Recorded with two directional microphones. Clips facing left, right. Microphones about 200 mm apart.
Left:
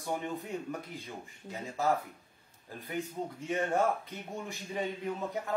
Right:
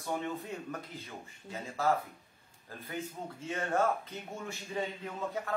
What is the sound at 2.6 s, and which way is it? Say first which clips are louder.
Speech: left 3 dB; 15° left (ahead or behind).